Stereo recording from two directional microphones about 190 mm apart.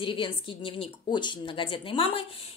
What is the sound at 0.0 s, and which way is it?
Speech, 25° left (ahead or behind).